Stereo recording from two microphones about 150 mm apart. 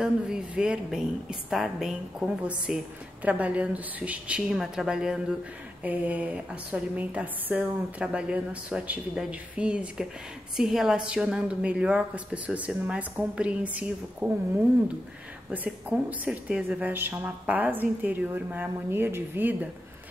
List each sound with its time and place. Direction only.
0.0 s a woman's voice: 5° right (ahead or behind)
15.5 s a woman's voice: 10° right (ahead or behind)